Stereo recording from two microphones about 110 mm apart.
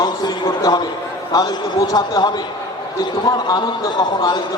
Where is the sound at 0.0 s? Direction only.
40° left (ahead or behind).